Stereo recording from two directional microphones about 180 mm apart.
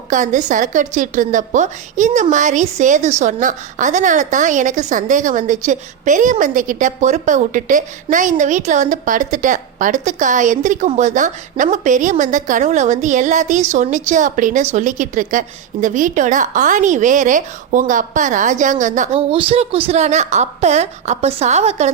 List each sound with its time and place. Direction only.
0.1 s a woman's voice: 45° right (ahead or behind)
19.3 s a woman's voice: 30° right (ahead or behind)